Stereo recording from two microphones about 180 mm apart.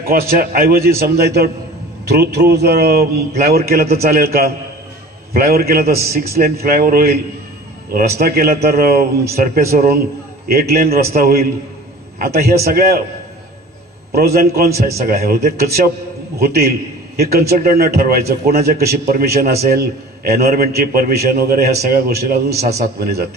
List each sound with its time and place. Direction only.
0.4 s a man's voice: 55° right (ahead or behind)
8.2 s a man's voice: 60° right (ahead or behind)
14.1 s a man's voice: 60° right (ahead or behind)